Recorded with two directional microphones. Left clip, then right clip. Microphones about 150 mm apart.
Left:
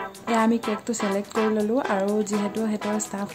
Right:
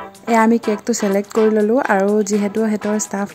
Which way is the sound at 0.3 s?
50° right (ahead or behind).